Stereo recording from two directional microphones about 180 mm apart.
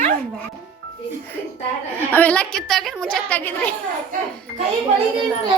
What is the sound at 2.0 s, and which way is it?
A woman's voice, 10° left (ahead or behind).